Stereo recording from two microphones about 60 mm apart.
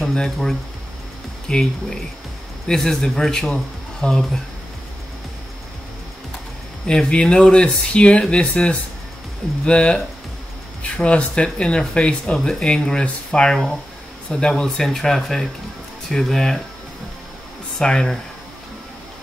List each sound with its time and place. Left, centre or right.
0.0 s speech: centre
6.9 s speech: centre
17.7 s speech: centre